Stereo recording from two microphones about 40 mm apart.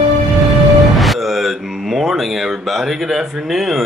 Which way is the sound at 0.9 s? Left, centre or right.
Centre.